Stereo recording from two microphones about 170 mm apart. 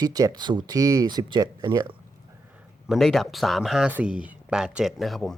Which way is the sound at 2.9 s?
Centre (ahead or behind).